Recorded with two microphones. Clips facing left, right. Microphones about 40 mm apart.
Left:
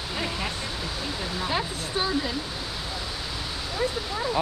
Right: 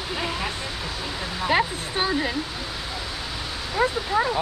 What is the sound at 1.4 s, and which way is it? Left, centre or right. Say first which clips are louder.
Speech: right 9 dB; right.